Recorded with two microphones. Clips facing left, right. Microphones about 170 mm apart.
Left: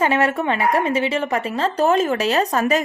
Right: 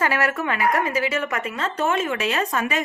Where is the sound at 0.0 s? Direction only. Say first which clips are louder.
Left 4 dB; 25° left (ahead or behind).